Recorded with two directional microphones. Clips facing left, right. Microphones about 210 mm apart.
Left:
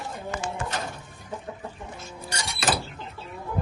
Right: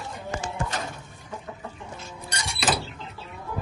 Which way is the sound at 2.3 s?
Centre (ahead or behind).